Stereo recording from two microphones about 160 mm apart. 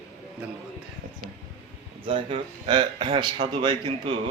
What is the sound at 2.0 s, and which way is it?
Speech, 35° right (ahead or behind).